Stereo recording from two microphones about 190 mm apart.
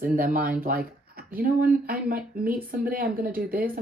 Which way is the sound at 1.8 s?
50° right (ahead or behind).